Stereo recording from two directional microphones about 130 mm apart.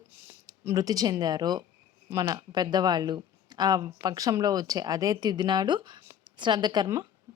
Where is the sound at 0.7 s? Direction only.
30° right (ahead or behind).